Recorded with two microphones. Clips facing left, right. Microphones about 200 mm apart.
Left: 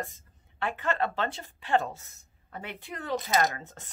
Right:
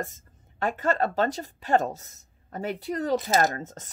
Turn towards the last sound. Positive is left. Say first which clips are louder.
# right 3 dB
turn(degrees=-40)  # may be behind; listen again after turning